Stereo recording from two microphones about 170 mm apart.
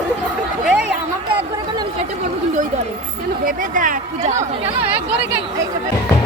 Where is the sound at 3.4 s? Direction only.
50° right (ahead or behind).